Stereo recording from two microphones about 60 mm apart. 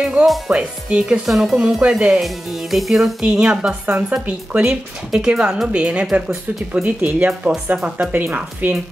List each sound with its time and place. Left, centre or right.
0.0 s speech: centre
1.2 s speech: centre
2.2 s music: centre
3.3 s a woman's voice: centre; by 8.8 s right